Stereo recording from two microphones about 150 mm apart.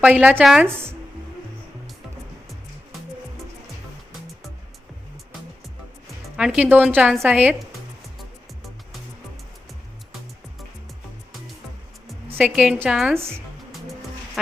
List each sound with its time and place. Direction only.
0.0 s a woman's voice: 10° right (ahead or behind)
6.3 s a woman's voice: 5° right (ahead or behind)
12.5 s a woman's voice: 10° right (ahead or behind)